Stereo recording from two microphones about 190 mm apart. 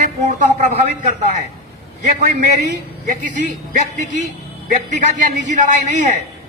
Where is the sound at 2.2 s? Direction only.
40° right (ahead or behind).